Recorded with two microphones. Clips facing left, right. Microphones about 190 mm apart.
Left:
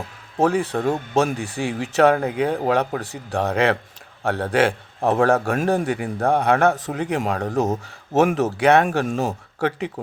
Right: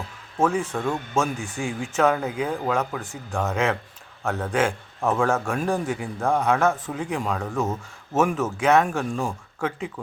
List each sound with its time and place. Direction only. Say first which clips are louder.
0.6 s speech: left 4 dB; 35° left (ahead or behind)
1.6 s a man's voice: left 5 dB; 65° left (ahead or behind)
3.0 s speech: left 4 dB; 35° left (ahead or behind)
3.5 s a man's voice: left 5 dB; 65° left (ahead or behind)
4.2 s a man's voice: left 4 dB; 35° left (ahead or behind)
5.2 s a man's voice: left 6 dB; 60° left (ahead or behind)
7.4 s speech: left 5 dB; 40° left (ahead or behind)
8.1 s speech: left 4 dB; 70° left (ahead or behind)